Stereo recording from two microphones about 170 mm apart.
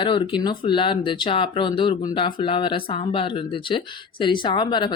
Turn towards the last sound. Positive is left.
turn(degrees=25)  # may be behind; listen again after turning